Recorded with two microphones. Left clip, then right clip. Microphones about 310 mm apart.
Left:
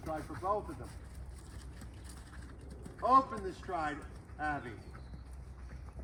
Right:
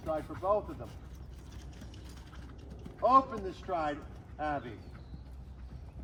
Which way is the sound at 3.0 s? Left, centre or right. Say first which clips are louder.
Right 2 dB; centre.